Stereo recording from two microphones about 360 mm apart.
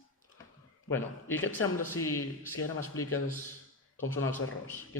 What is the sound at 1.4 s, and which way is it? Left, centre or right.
Speech, left.